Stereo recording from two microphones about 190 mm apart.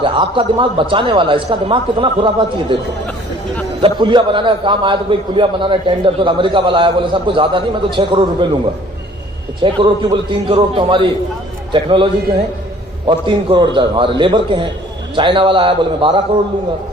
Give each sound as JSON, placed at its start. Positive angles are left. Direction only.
{"t": 0.0, "sound": "a man's voice", "side_deg": -25}
{"t": 3.8, "sound": "a man's voice", "side_deg": -25}
{"t": 9.6, "sound": "a man's voice", "side_deg": -25}
{"t": 13.1, "sound": "a man's voice", "side_deg": -25}